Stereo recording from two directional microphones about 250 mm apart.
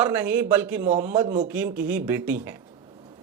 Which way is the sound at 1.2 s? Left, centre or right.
Right.